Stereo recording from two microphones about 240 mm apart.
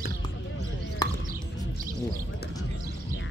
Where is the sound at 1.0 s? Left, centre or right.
Centre.